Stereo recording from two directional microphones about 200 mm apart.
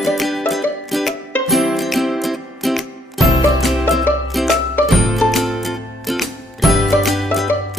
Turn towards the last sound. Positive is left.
turn(degrees=0)  # may be behind; listen again after turning